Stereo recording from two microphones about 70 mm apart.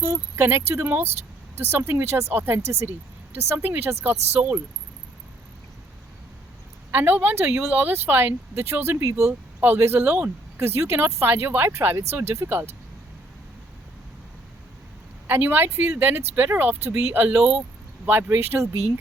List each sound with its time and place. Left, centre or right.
0.0 s speech: right
0.4 s speech: right
6.9 s speech: right
15.3 s speech: right; by 17.6 s centre
18.0 s speech: right